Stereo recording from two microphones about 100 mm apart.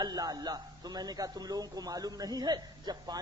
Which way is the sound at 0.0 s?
40° right (ahead or behind).